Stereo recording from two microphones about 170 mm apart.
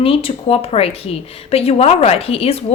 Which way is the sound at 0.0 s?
35° left (ahead or behind).